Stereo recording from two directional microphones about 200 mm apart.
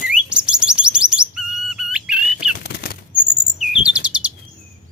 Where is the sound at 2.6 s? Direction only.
50° left (ahead or behind).